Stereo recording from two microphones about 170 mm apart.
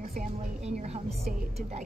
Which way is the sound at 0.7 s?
40° right (ahead or behind).